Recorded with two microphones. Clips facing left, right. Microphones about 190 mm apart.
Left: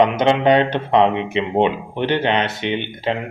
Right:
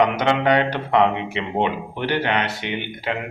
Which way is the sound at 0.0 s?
20° left (ahead or behind).